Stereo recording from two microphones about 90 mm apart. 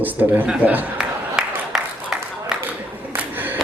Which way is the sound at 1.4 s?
10° right (ahead or behind).